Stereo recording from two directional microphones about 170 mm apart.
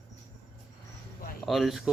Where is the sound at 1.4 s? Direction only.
Centre (ahead or behind).